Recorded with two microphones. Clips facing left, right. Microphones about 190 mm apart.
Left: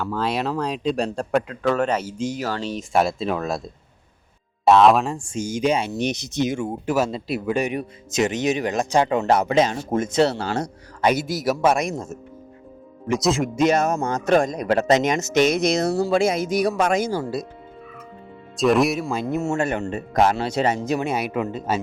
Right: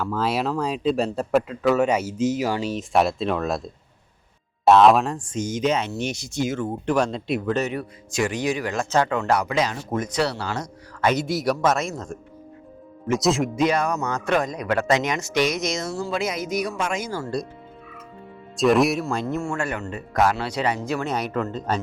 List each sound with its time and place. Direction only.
0.0 s speech: 5° right (ahead or behind); by 10.7 s 30° left (ahead or behind)
11.0 s speech: 10° left (ahead or behind)
13.7 s speech: 45° left (ahead or behind)
14.7 s speech: 20° left (ahead or behind)
15.7 s speech: 65° left (ahead or behind)
16.0 s speech: 35° left (ahead or behind)
17.1 s speech: 15° left (ahead or behind)
18.5 s speech: centre (ahead or behind)
19.0 s speech: 15° left (ahead or behind)
19.5 s speech: 25° left (ahead or behind); by 21.8 s 5° left (ahead or behind)